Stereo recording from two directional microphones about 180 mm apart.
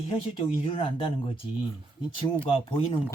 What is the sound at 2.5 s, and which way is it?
Speech, 30° left (ahead or behind).